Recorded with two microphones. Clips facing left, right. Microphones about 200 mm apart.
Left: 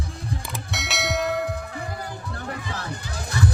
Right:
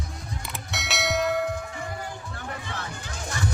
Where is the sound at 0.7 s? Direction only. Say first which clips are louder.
Even; centre (ahead or behind).